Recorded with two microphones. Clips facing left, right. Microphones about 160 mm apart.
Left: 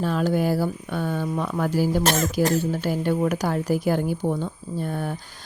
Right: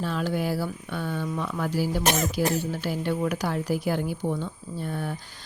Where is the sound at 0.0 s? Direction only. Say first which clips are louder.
Left 5 dB; 45° left (ahead or behind).